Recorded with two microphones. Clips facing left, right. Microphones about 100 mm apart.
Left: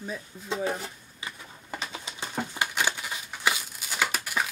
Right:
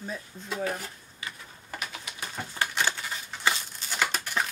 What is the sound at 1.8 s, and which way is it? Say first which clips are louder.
Bird: even; 25° left (ahead or behind).